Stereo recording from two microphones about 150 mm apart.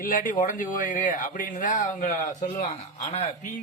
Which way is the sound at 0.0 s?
65° left (ahead or behind).